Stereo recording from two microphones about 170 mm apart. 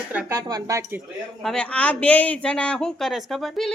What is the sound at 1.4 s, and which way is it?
Speech, 5° left (ahead or behind).